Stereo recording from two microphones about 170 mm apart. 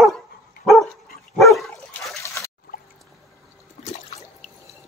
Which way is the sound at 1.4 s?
Centre (ahead or behind).